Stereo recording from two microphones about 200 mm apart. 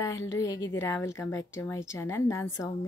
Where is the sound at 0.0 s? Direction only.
15° left (ahead or behind).